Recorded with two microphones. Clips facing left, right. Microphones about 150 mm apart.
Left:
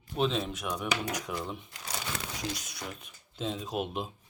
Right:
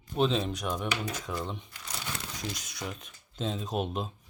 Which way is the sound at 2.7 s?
5° left (ahead or behind).